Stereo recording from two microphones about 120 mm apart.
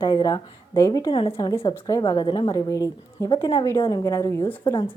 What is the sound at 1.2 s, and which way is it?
Speech, 45° left (ahead or behind).